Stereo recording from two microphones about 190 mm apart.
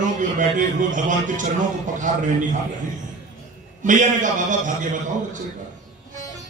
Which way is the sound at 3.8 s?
40° right (ahead or behind).